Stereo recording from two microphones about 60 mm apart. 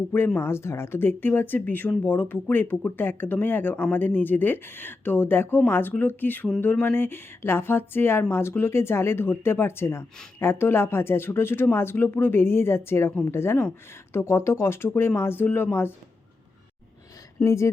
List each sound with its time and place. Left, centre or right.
0.3 s speech: left
17.4 s speech: left